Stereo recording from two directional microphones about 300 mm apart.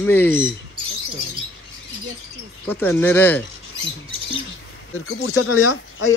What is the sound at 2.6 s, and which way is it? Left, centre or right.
Speech, centre.